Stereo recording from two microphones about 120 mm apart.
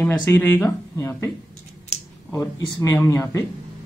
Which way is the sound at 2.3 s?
20° left (ahead or behind).